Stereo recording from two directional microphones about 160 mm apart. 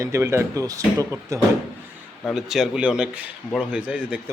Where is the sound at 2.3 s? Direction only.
5° right (ahead or behind).